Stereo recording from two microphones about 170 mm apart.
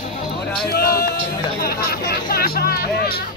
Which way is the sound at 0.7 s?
60° left (ahead or behind).